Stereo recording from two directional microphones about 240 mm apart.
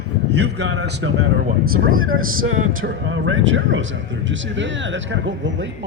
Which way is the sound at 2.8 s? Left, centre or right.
Right.